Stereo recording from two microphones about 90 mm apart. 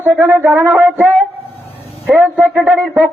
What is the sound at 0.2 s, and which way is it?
Speech, 25° right (ahead or behind).